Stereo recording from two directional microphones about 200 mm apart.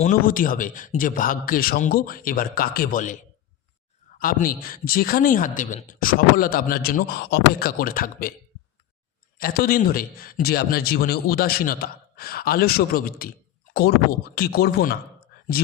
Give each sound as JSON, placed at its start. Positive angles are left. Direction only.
{"t": 0.0, "sound": "speech", "side_deg": 40}
{"t": 4.2, "sound": "speech", "side_deg": 45}
{"t": 9.4, "sound": "speech", "side_deg": 45}